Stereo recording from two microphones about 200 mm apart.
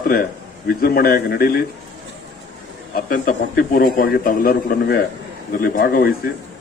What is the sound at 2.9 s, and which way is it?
Speech, 45° left (ahead or behind).